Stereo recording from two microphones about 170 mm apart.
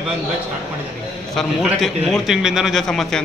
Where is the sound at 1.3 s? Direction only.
Centre (ahead or behind).